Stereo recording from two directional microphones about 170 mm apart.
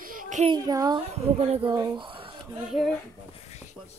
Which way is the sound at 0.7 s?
25° right (ahead or behind).